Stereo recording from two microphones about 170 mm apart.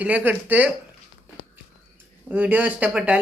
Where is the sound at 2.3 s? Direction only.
10° right (ahead or behind).